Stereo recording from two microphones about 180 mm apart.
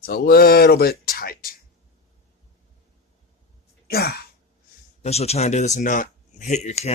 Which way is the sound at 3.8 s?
60° left (ahead or behind).